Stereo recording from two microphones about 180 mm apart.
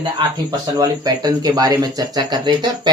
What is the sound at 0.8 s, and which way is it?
Speech, 20° right (ahead or behind).